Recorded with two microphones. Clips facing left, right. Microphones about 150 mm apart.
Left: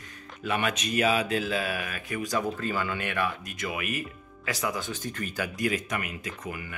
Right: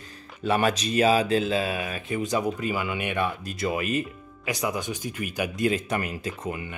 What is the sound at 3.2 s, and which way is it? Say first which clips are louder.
Speech: right 4 dB; 30° right (ahead or behind).